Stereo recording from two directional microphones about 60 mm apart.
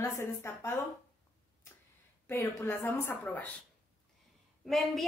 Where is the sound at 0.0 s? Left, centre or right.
Left.